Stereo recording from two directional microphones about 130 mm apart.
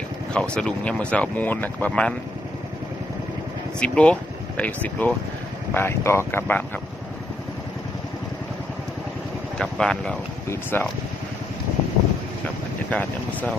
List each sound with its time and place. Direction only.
0.3 s speech: 10° left (ahead or behind)
3.8 s speech: 10° left (ahead or behind)
9.6 s speech: 5° left (ahead or behind)
12.9 s speech: 10° left (ahead or behind)